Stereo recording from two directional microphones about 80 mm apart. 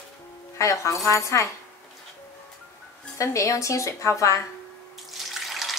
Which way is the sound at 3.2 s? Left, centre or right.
Left.